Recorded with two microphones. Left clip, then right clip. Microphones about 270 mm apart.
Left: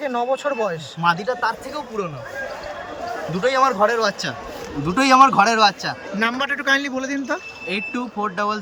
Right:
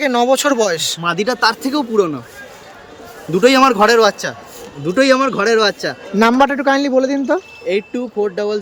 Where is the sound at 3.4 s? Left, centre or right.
Right.